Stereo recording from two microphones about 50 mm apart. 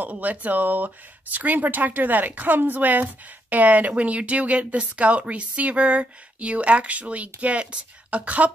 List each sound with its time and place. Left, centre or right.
0.0 s speech: right